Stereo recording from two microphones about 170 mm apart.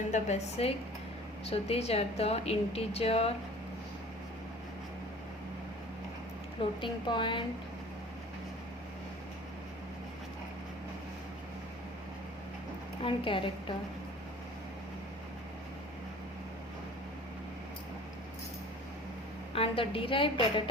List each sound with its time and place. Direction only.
0.1 s a woman's voice: 40° left (ahead or behind)
6.8 s a woman's voice: 30° left (ahead or behind)
13.0 s a woman's voice: 30° left (ahead or behind)
19.5 s a woman's voice: 30° left (ahead or behind)